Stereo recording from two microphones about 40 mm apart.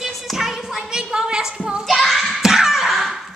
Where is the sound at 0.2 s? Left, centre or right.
Centre.